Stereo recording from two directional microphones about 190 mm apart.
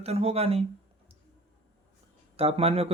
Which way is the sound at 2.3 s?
30° right (ahead or behind).